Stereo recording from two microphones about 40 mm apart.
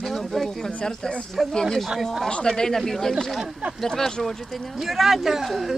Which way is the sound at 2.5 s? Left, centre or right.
Centre.